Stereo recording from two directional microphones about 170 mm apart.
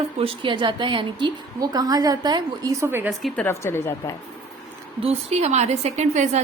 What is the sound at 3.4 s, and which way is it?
Speech, 15° left (ahead or behind).